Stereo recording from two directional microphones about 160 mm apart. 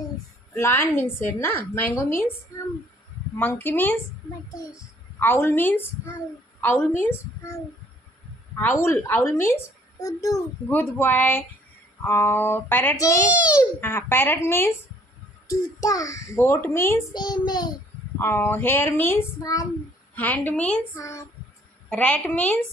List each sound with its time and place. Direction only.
0.6 s a woman's voice: 15° left (ahead or behind)
2.5 s a sound: 20° left (ahead or behind)
3.3 s a woman's voice: 10° left (ahead or behind)
5.2 s a woman's voice: 15° left (ahead or behind)
13.3 s a child's voice: 10° right (ahead or behind)
13.6 s a woman's voice: 15° left (ahead or behind)
15.8 s a woman's voice: 20° left (ahead or behind)
17.1 s child singing: 25° left (ahead or behind)
18.2 s a woman's voice: 15° left (ahead or behind)
20.2 s a woman's voice: 10° left (ahead or behind)
20.9 s child singing: 20° left (ahead or behind)
21.8 s a woman's voice: 5° left (ahead or behind)